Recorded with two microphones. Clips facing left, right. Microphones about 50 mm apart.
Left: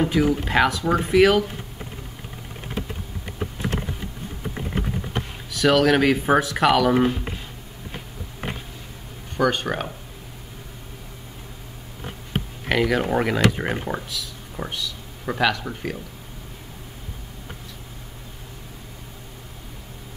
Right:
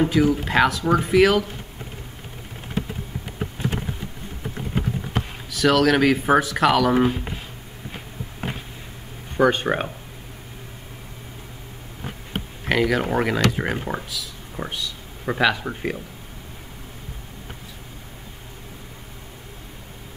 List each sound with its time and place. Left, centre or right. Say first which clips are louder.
0.0 s speech: right 1 dB; centre
5.5 s speech: even; centre
9.4 s speech: right 3 dB; right
12.6 s speech: right 1 dB; centre
13.8 s a sound: even; centre
15.3 s speech: right 1 dB; centre